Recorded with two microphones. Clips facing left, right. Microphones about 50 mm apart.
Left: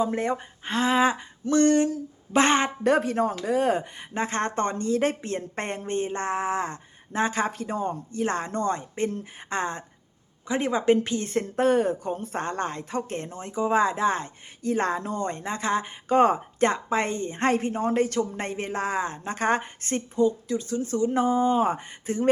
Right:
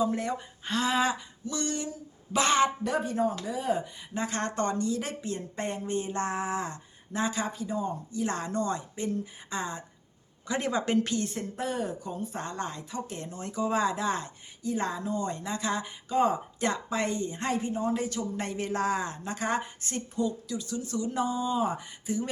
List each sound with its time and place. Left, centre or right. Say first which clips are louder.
0.0 s speech: left 3 dB; left
1.5 s speech: left 13 dB; left
2.3 s speech: left 3 dB; left
2.8 s speech: left 6 dB; left
4.1 s speech: left 5 dB; left
8.2 s speech: left 4 dB; left
10.4 s speech: left 6 dB; left
11.2 s speech: left 8 dB; left
14.6 s speech: left 5 dB; left
16.1 s speech: left 6 dB; left
18.4 s speech: even; left
20.1 s speech: left 8 dB; left